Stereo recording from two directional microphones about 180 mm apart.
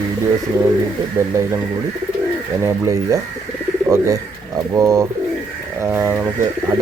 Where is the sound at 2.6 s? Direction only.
15° right (ahead or behind).